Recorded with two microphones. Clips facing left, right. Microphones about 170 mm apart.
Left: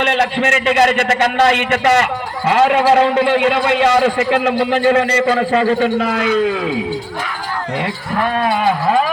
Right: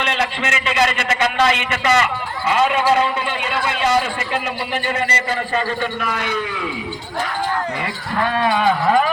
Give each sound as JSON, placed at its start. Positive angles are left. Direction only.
{"t": 0.0, "sound": "a man's voice", "side_deg": 55}
{"t": 2.5, "sound": "a man's voice", "side_deg": 70}